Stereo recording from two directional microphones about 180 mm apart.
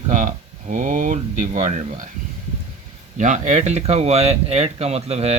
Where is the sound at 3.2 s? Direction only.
40° right (ahead or behind).